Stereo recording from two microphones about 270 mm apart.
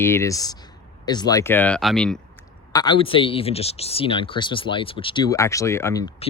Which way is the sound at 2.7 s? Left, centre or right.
Centre.